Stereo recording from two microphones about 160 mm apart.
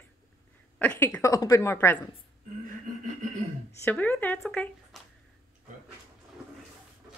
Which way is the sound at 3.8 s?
10° left (ahead or behind).